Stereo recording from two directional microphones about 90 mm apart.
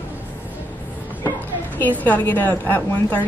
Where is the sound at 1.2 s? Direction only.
20° left (ahead or behind).